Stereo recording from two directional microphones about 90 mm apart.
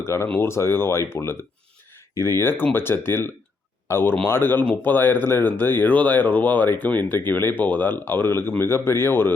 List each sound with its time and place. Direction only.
0.0 s speech: 30° left (ahead or behind)